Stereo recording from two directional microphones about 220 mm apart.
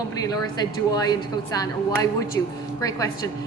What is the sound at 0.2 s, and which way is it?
Speech, 15° left (ahead or behind).